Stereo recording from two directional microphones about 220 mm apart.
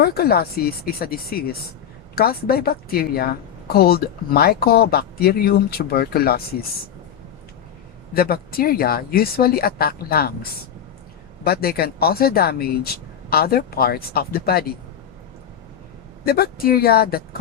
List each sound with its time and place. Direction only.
0.0 s speech: 45° left (ahead or behind)
8.1 s speech: 45° left (ahead or behind)
11.4 s speech: 45° left (ahead or behind)
16.2 s speech: 45° left (ahead or behind)